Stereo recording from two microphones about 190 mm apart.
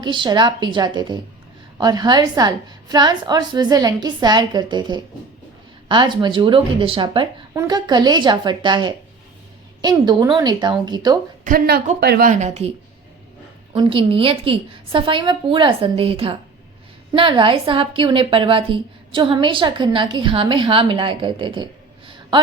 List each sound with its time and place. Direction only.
0.0 s a woman's voice: 25° right (ahead or behind)
11.4 s speech: 50° right (ahead or behind)
12.3 s speech: 35° right (ahead or behind)
13.7 s a woman's voice: 30° right (ahead or behind)